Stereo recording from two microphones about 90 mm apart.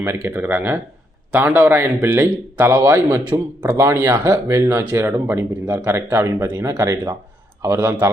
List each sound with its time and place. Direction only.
0.0 s a man's voice: 30° right (ahead or behind)